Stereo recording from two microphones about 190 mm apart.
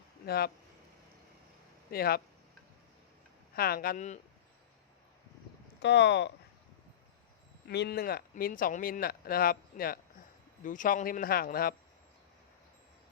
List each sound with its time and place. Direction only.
0.3 s speech: 55° left (ahead or behind)
1.9 s speech: 55° left (ahead or behind)
3.5 s speech: 50° left (ahead or behind)
5.8 s speech: 65° left (ahead or behind)
7.7 s speech: 60° left (ahead or behind)